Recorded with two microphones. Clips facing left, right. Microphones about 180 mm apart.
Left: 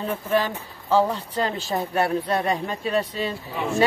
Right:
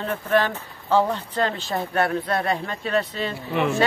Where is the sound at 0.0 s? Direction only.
10° left (ahead or behind).